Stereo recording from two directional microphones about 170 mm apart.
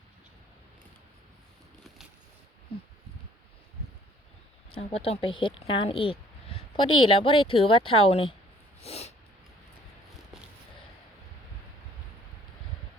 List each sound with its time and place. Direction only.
4.7 s speech: 35° left (ahead or behind)
8.8 s snort: 35° left (ahead or behind)
10.3 s a sound: centre (ahead or behind)